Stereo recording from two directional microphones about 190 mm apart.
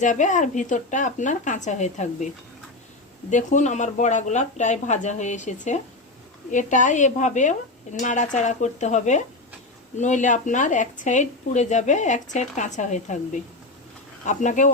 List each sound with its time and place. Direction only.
0.0 s speech: 40° left (ahead or behind)